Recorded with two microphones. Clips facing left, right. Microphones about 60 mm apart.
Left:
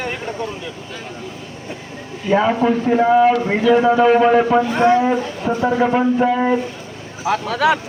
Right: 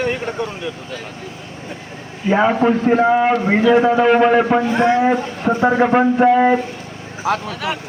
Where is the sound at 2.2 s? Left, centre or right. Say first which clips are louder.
Right 1 dB; right.